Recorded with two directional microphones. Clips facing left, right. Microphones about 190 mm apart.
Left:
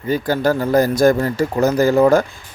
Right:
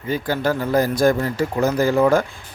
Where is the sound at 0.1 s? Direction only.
40° left (ahead or behind).